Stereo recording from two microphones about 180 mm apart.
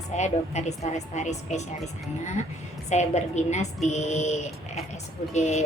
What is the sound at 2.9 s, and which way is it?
A woman's voice, 40° left (ahead or behind).